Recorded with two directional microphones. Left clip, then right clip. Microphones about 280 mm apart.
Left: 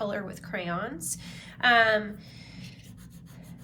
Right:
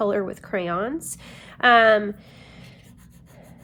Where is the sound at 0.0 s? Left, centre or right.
Right.